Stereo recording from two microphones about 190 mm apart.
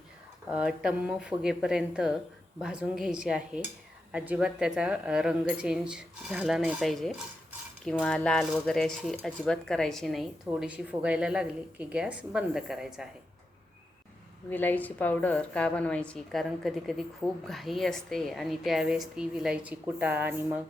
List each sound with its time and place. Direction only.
0.5 s a woman's voice: 5° right (ahead or behind)
14.5 s a woman's voice: 10° left (ahead or behind); by 20.6 s 10° right (ahead or behind)